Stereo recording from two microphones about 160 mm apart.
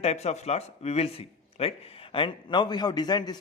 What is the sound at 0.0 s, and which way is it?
A man's voice, 40° left (ahead or behind).